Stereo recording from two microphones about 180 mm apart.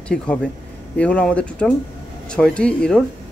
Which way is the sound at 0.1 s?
5° left (ahead or behind).